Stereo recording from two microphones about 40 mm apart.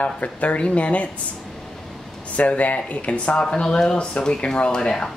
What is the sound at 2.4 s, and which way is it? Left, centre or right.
Speech, left.